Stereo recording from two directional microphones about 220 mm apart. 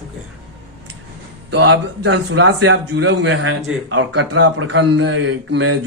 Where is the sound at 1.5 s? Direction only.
50° right (ahead or behind).